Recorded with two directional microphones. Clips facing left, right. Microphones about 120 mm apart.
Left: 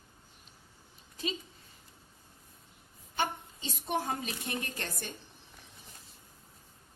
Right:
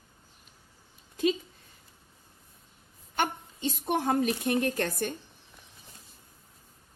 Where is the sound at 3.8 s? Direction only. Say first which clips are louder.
Right 7 dB; 55° right (ahead or behind).